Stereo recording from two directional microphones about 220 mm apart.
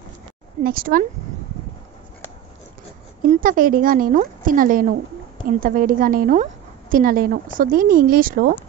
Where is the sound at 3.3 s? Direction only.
40° right (ahead or behind).